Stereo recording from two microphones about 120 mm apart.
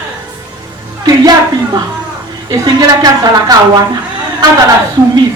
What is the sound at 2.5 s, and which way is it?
A woman's voice, 30° right (ahead or behind).